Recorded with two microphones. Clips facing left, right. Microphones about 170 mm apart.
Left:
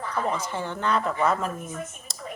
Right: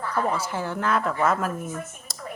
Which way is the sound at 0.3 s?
10° right (ahead or behind).